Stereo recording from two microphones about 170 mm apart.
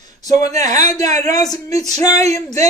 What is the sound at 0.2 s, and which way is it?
A man's voice, 20° left (ahead or behind).